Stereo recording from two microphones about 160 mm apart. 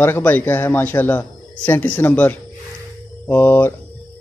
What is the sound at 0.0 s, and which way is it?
Speech, 10° left (ahead or behind).